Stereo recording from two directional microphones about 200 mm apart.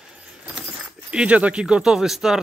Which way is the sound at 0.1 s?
5° right (ahead or behind).